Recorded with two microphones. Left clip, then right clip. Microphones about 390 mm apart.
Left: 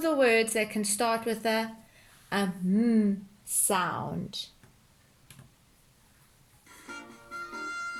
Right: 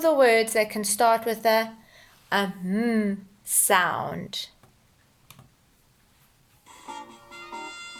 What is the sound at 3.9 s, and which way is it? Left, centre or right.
Speech, right.